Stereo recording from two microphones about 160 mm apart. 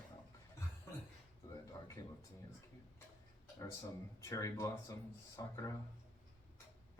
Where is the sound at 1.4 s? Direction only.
20° left (ahead or behind).